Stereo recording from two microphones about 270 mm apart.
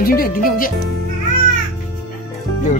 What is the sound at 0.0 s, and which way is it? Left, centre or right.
Speech, left.